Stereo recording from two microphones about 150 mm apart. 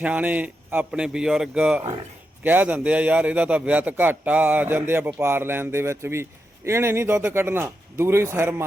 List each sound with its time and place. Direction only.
0.0 s a man's voice: 10° right (ahead or behind)